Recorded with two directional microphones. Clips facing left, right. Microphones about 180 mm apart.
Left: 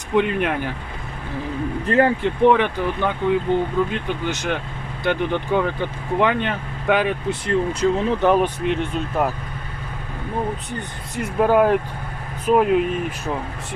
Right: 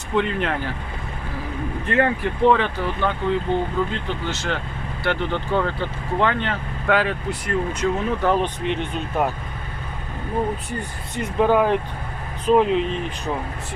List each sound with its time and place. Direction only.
0.1 s speech: 15° left (ahead or behind)
1.9 s speech: 35° left (ahead or behind)
2.2 s speech: 15° left (ahead or behind)
7.4 s speech: 30° left (ahead or behind)
8.6 s speech: centre (ahead or behind)
11.1 s speech: 5° left (ahead or behind)